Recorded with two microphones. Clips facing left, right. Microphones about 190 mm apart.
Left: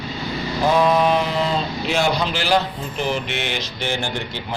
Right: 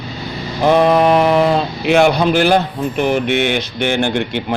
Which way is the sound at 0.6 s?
60° right (ahead or behind).